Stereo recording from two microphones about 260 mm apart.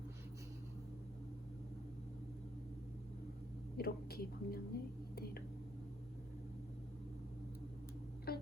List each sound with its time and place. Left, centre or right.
3.8 s speech: left
8.3 s music: left